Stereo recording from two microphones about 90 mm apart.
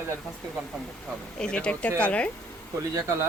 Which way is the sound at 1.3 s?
10° left (ahead or behind).